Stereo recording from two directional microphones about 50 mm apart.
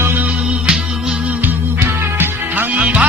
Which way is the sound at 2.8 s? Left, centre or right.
Right.